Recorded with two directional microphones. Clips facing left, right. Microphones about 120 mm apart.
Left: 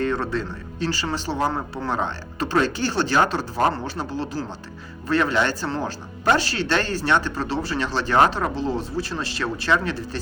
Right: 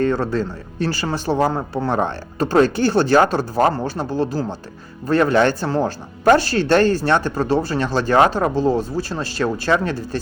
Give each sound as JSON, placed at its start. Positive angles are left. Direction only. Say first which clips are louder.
{"t": 0.0, "sound": "speech", "louder": "right 5 dB", "side_deg": -40}